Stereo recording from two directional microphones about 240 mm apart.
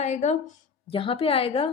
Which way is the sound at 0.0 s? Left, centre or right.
Left.